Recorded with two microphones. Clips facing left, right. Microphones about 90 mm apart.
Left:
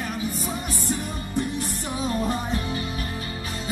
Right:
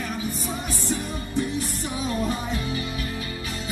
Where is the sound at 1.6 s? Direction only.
40° left (ahead or behind).